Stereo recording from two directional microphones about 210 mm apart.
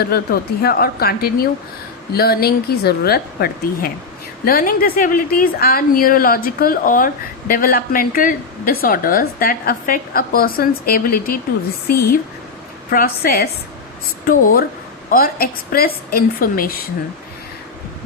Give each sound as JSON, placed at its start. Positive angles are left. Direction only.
{"t": 0.0, "sound": "a woman's voice", "side_deg": 50}
{"t": 15.1, "sound": "a woman's voice", "side_deg": 45}